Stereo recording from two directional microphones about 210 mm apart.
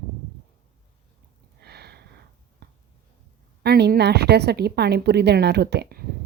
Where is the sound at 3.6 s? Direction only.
50° right (ahead or behind).